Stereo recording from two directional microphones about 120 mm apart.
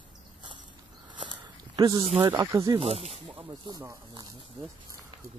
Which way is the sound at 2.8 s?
55° right (ahead or behind).